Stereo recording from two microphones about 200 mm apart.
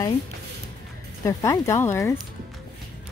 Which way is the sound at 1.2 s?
15° left (ahead or behind).